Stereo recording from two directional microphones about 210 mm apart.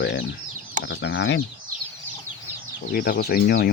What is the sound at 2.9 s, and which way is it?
Speech, 45° left (ahead or behind).